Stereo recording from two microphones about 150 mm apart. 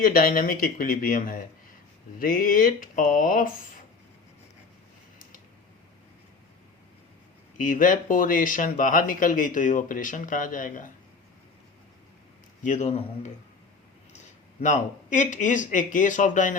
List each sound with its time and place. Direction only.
0.0 s speech: 70° left (ahead or behind)
7.6 s speech: 60° left (ahead or behind)
12.6 s speech: 55° left (ahead or behind)
14.6 s speech: 55° left (ahead or behind)